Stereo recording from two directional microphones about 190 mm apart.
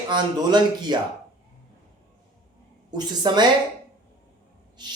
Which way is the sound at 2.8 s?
20° right (ahead or behind).